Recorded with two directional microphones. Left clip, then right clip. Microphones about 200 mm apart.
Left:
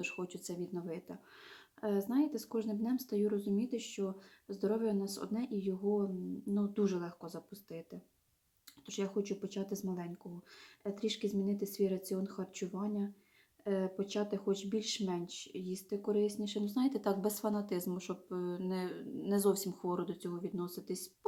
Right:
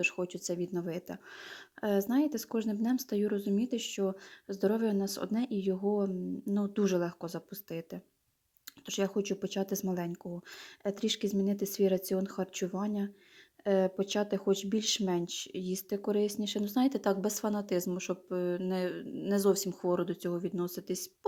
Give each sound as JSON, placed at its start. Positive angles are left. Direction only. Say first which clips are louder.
{"t": 0.0, "sound": "speech", "louder": "right 9 dB", "side_deg": -30}